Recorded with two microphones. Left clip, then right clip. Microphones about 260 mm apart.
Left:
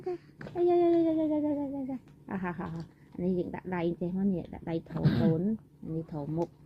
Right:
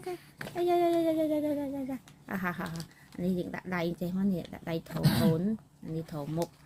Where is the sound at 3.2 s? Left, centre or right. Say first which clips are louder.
Left 2 dB; right.